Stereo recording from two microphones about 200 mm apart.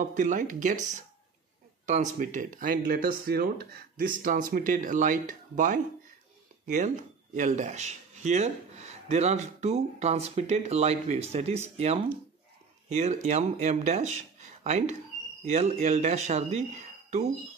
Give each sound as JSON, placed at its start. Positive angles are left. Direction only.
{"t": 0.0, "sound": "speech", "side_deg": -40}